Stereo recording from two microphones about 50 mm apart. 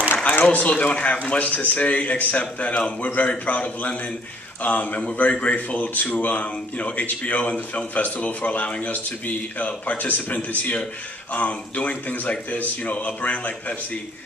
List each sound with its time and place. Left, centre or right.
0.4 s speech: left